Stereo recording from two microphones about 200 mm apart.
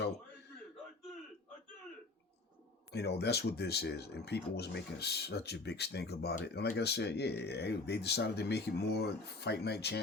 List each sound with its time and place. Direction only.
2.9 s speech: 55° left (ahead or behind)